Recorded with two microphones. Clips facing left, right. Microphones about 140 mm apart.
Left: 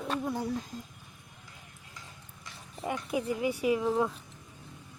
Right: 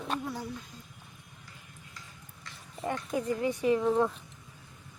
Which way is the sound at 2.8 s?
10° left (ahead or behind).